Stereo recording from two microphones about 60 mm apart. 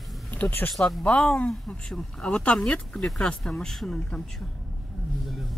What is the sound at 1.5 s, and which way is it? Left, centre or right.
Speech, centre.